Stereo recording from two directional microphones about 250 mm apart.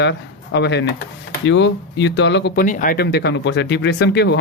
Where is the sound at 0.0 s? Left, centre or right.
Left.